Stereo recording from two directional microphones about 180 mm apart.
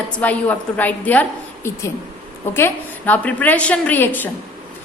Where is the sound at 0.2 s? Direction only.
10° left (ahead or behind).